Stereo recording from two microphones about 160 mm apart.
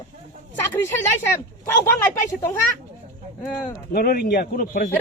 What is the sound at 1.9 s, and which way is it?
Speech, 20° left (ahead or behind).